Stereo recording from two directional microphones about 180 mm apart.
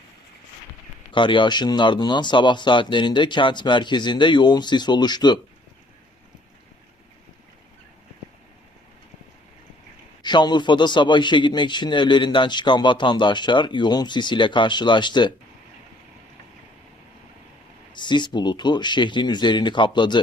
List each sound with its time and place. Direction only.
1.1 s a man's voice: 25° left (ahead or behind)
10.2 s a man's voice: 25° left (ahead or behind)
17.9 s a man's voice: 25° left (ahead or behind)